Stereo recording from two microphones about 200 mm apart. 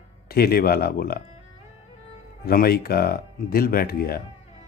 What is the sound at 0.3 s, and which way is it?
Speech, 50° left (ahead or behind).